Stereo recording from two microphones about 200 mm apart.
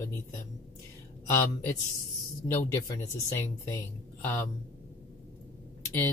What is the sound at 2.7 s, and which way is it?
Speech, 15° left (ahead or behind).